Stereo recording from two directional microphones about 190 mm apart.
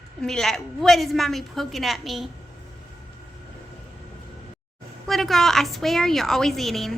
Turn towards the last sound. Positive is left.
turn(degrees=0)  # may be behind; listen again after turning